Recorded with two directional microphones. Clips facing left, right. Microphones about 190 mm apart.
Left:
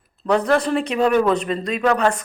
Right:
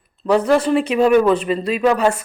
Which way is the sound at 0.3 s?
5° right (ahead or behind).